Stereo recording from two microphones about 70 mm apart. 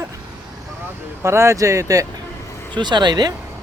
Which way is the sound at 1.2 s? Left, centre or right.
Right.